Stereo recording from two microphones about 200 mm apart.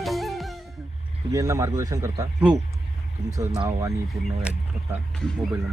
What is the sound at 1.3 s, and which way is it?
Speech, 15° right (ahead or behind).